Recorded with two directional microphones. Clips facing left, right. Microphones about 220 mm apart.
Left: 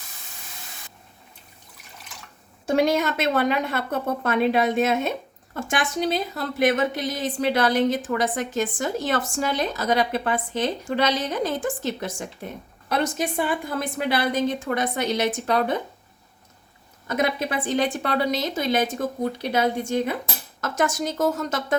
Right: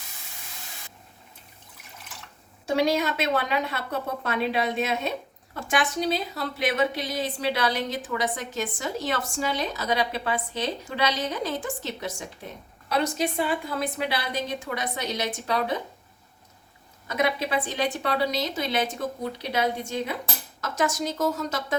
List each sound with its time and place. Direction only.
2.6 s a woman's voice: 50° left (ahead or behind)
17.1 s a woman's voice: 50° left (ahead or behind)